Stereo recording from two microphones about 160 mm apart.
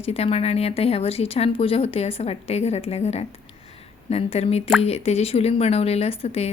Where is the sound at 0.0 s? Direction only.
40° left (ahead or behind).